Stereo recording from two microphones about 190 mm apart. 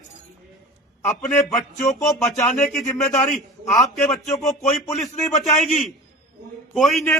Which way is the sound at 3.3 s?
Centre (ahead or behind).